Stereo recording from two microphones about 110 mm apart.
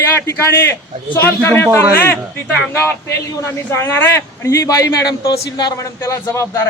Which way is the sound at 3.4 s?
25° left (ahead or behind).